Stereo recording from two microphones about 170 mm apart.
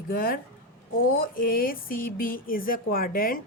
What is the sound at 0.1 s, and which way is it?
A woman's voice, 60° left (ahead or behind).